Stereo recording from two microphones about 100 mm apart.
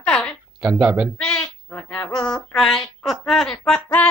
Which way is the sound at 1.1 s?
10° left (ahead or behind).